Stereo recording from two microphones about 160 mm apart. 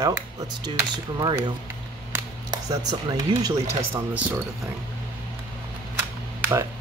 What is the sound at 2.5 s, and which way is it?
Speech, 25° right (ahead or behind).